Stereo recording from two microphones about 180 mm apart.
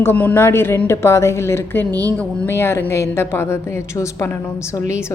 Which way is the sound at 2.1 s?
10° left (ahead or behind).